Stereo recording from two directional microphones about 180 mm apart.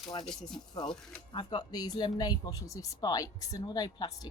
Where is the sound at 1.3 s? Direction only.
25° left (ahead or behind).